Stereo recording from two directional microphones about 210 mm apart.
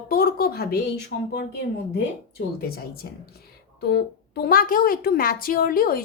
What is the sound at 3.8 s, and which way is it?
Speech, 50° left (ahead or behind).